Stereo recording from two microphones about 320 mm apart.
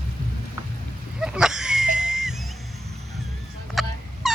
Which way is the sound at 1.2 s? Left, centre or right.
Centre.